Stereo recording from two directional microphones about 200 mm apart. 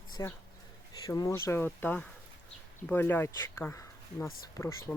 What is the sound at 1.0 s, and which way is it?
Speech, 15° left (ahead or behind).